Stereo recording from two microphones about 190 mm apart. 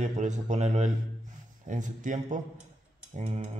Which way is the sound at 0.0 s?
40° right (ahead or behind).